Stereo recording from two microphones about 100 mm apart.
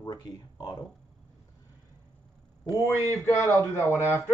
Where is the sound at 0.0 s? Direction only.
35° left (ahead or behind).